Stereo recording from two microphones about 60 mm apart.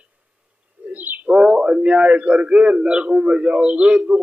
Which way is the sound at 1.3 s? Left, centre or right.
Centre.